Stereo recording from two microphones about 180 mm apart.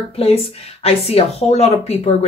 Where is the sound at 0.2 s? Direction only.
30° left (ahead or behind).